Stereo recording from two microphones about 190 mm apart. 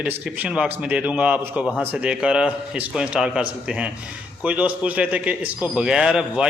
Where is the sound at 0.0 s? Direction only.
5° right (ahead or behind).